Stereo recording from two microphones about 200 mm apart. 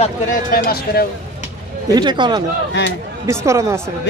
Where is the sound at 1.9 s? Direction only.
20° right (ahead or behind).